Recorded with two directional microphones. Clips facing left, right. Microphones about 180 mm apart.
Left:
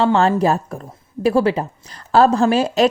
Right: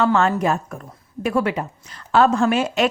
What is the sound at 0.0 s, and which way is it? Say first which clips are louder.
A woman's voice: left 3 dB; 30° left (ahead or behind).